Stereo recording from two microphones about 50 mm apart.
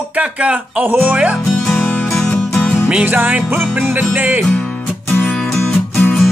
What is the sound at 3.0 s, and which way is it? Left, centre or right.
Music, right.